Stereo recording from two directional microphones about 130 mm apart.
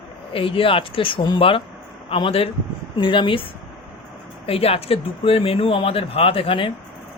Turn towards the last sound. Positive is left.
turn(degrees=45)  # may be behind; listen again after turning